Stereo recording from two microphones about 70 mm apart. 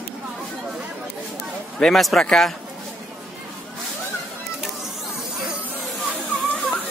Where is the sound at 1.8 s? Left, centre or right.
Centre.